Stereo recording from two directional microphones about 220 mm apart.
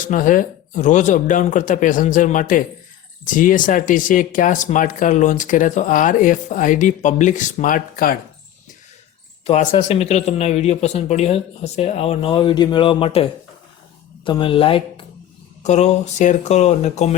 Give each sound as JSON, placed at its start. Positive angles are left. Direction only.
{"t": 0.0, "sound": "speech", "side_deg": 35}
{"t": 9.5, "sound": "speech", "side_deg": 25}
{"t": 14.3, "sound": "speech", "side_deg": 20}